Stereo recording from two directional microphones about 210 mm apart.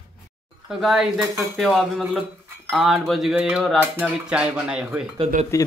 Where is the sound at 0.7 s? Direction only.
Centre (ahead or behind).